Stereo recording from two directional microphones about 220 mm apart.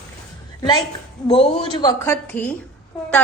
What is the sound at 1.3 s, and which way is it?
A woman's voice, 25° left (ahead or behind).